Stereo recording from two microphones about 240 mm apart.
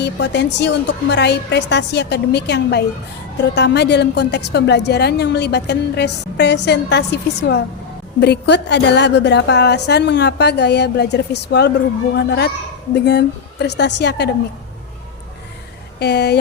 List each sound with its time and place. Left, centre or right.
0.0 s a woman's voice: left
16.0 s a woman's voice: left